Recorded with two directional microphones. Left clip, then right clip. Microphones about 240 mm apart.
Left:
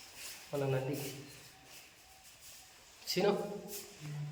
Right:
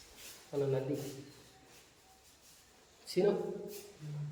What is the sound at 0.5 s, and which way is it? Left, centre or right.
Speech, centre.